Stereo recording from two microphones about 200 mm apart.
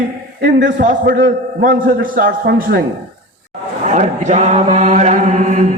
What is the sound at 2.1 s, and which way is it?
Speech, 45° right (ahead or behind).